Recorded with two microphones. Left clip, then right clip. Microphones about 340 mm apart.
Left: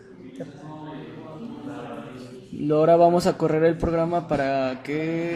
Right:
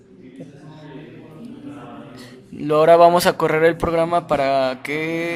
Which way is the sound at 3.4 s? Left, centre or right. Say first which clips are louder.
Right 4 dB; right.